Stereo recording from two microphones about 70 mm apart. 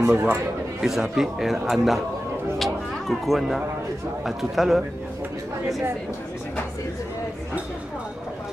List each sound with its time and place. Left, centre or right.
0.0 s a man's voice: right
0.8 s speech: centre